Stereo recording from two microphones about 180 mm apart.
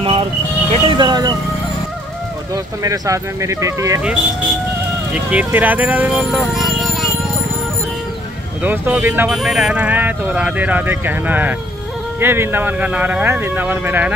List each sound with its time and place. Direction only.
0.0 s speech: 30° right (ahead or behind)
2.5 s speech: 20° right (ahead or behind)
5.1 s speech: 5° right (ahead or behind)
8.6 s speech: 10° right (ahead or behind)